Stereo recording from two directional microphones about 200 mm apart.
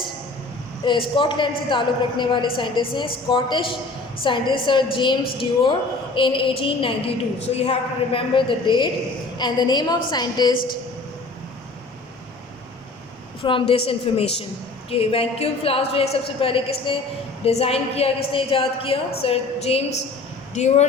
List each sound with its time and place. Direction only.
0.9 s a woman's voice: 25° left (ahead or behind)
13.4 s a woman's voice: 25° left (ahead or behind)